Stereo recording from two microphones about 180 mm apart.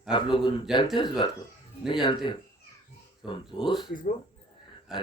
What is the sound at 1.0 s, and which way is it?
Speech, 25° left (ahead or behind).